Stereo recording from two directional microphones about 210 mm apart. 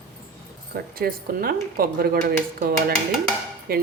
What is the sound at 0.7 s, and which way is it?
A woman's voice, 45° right (ahead or behind).